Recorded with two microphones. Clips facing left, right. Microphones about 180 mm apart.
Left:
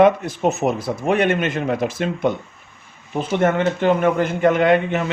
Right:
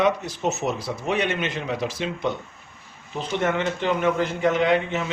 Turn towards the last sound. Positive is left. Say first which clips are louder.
# left 5 dB
turn(degrees=55)  # may be behind; listen again after turning